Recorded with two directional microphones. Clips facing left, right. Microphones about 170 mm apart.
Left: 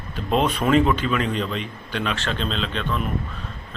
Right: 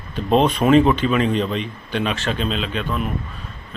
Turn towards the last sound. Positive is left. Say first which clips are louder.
# right 2 dB
turn(degrees=-10)  # may be behind; listen again after turning